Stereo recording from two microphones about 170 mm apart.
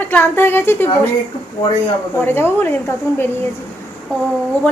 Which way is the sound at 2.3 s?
15° left (ahead or behind).